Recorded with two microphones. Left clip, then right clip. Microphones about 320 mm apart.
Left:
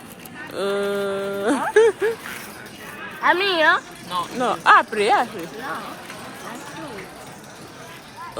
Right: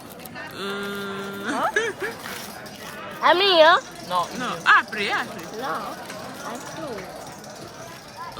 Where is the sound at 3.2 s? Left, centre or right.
Right.